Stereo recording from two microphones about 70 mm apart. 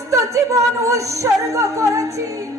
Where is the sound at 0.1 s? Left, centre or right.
Right.